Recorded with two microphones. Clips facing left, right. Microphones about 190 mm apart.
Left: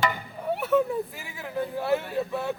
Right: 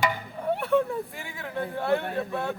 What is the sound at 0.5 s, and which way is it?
Speech, 5° left (ahead or behind).